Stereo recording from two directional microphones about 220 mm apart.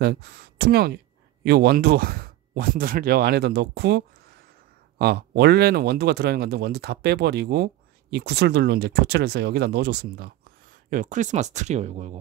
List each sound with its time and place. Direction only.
0.0 s speech: 45° right (ahead or behind)
10.9 s speech: 35° right (ahead or behind)